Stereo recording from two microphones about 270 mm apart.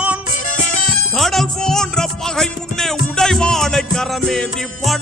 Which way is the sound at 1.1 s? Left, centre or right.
Centre.